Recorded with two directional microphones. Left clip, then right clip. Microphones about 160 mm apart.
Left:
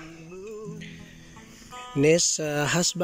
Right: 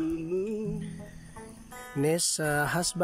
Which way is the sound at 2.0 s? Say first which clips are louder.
Left 7 dB; centre (ahead or behind).